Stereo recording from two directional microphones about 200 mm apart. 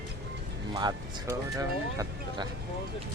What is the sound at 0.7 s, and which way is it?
Speech, 20° right (ahead or behind).